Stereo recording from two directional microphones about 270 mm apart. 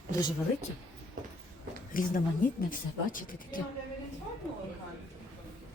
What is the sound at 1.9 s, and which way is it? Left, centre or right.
Speech, left.